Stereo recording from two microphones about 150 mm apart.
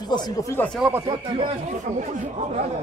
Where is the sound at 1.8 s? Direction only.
50° right (ahead or behind).